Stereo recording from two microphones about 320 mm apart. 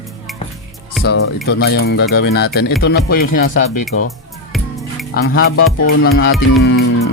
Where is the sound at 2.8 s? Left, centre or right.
Left.